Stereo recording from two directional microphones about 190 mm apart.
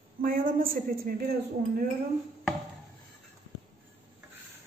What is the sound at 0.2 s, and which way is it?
Speech, 45° right (ahead or behind).